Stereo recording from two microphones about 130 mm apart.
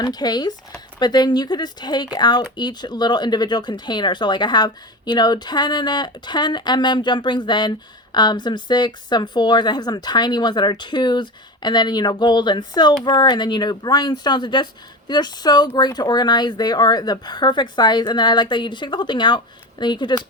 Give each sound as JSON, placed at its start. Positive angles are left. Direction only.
{"t": 0.0, "sound": "a woman's voice", "side_deg": 30}